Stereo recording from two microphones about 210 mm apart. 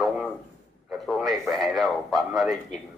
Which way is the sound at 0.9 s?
Centre (ahead or behind).